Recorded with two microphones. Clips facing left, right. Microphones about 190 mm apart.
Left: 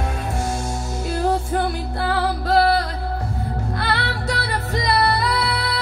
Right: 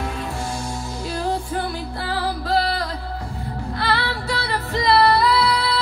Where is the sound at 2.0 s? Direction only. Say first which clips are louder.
Left 3 dB; 55° left (ahead or behind).